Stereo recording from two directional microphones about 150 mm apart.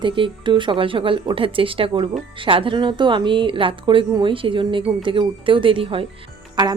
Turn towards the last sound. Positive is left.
turn(degrees=-30)  # may be behind; listen again after turning